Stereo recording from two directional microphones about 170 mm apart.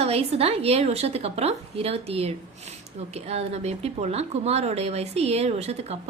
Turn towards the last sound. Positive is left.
turn(degrees=-40)  # may be behind; listen again after turning